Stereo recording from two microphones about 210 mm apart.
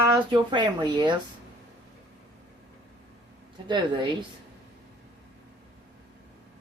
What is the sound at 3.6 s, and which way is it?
Speech, 20° right (ahead or behind).